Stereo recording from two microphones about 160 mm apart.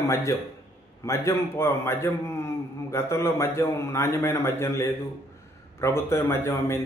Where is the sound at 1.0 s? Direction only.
15° left (ahead or behind).